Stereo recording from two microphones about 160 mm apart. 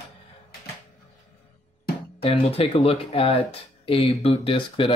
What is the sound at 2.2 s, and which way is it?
Speech, 35° left (ahead or behind).